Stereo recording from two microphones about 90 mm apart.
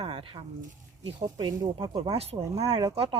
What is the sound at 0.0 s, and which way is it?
Sheep, 75° right (ahead or behind).